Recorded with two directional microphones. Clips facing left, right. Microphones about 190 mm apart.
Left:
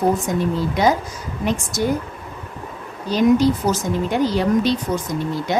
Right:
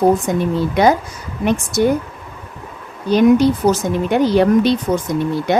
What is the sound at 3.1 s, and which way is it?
A woman's voice, 60° right (ahead or behind).